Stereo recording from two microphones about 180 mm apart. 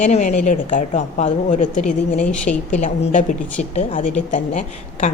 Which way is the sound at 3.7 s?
40° left (ahead or behind).